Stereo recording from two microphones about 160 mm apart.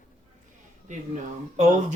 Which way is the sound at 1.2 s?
50° right (ahead or behind).